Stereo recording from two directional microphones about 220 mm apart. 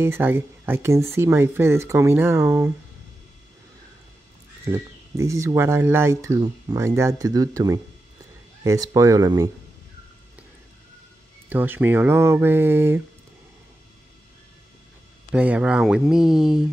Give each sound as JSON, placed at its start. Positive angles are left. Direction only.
{"t": 0.0, "sound": "speech", "side_deg": -10}
{"t": 4.6, "sound": "speech", "side_deg": -15}
{"t": 11.4, "sound": "speech", "side_deg": -10}
{"t": 15.3, "sound": "speech", "side_deg": -5}